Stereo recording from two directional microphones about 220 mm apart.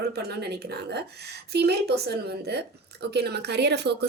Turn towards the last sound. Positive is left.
turn(degrees=-50)  # may be behind; listen again after turning